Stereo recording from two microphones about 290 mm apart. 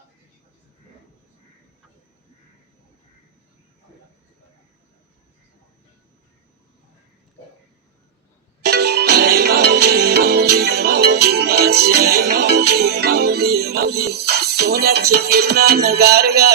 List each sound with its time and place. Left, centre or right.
8.6 s music: right